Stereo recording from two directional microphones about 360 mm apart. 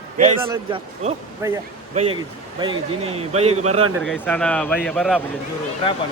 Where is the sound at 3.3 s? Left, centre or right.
Centre.